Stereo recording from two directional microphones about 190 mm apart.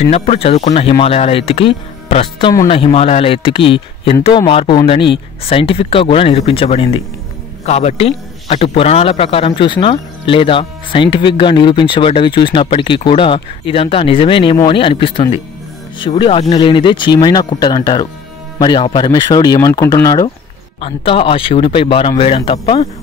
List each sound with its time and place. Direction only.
0.1 s a man's voice: 30° left (ahead or behind)